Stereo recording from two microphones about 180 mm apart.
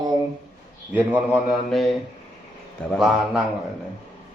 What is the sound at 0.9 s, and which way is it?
Speech, 10° right (ahead or behind).